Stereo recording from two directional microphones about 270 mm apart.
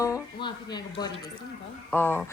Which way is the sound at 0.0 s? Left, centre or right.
Centre.